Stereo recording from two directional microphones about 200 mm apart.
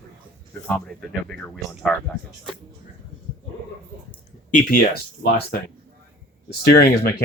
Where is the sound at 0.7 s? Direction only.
Centre (ahead or behind).